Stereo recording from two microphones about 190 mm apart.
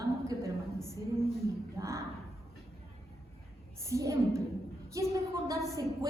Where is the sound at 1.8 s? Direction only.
15° right (ahead or behind).